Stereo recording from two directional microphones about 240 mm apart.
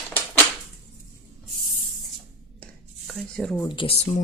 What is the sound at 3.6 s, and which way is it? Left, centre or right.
Speech, left.